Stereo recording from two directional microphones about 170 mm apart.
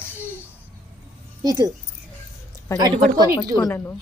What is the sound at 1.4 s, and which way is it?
Speech, 20° right (ahead or behind).